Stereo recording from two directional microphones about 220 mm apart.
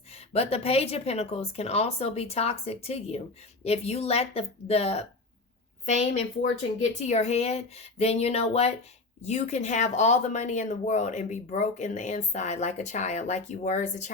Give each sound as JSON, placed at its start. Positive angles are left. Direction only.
{"t": 0.3, "sound": "a woman's voice", "side_deg": 25}